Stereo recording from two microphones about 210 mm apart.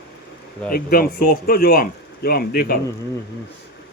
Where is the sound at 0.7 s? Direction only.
45° left (ahead or behind).